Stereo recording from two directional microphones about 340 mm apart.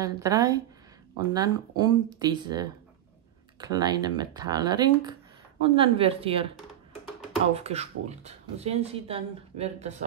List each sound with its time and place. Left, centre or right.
0.0 s speech: centre
7.5 s speech: centre